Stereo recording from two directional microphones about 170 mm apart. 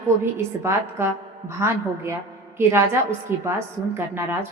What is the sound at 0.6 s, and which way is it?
A woman's voice, 15° right (ahead or behind).